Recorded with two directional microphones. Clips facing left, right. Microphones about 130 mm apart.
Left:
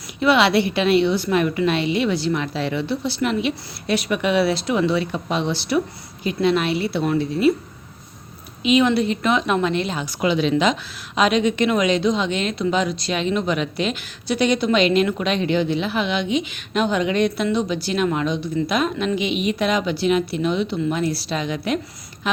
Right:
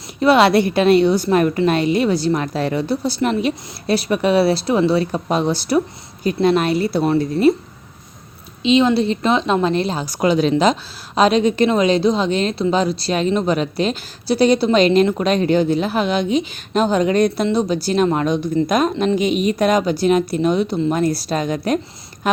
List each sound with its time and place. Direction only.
0.2 s a woman's voice: 40° right (ahead or behind)
8.6 s a woman's voice: 30° right (ahead or behind)